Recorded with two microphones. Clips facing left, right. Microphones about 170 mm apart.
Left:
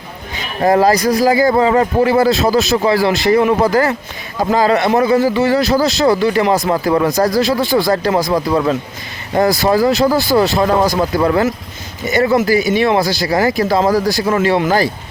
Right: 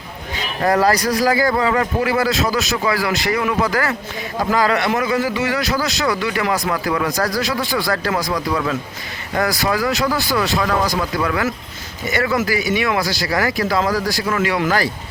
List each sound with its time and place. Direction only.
0.6 s a man's voice: 20° left (ahead or behind)
12.5 s a man's voice: 35° left (ahead or behind)